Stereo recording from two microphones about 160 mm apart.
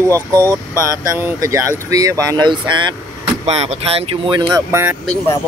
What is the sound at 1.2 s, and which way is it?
Speech, 15° right (ahead or behind).